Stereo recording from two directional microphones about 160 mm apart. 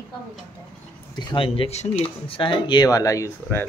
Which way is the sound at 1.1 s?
30° left (ahead or behind).